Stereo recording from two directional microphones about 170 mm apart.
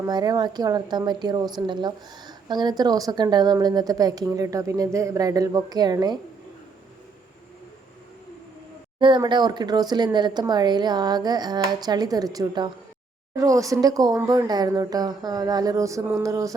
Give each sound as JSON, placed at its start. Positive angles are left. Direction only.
{"t": 0.0, "sound": "a woman's voice", "side_deg": -25}
{"t": 9.0, "sound": "a woman's voice", "side_deg": -30}